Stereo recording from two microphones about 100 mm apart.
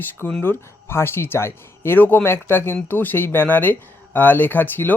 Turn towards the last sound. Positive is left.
turn(degrees=20)  # may be behind; listen again after turning